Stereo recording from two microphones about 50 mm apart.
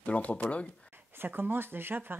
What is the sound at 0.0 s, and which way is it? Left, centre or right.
Speech, left.